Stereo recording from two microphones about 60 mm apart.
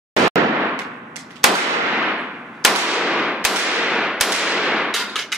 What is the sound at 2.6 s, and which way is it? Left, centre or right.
Gunshot, centre.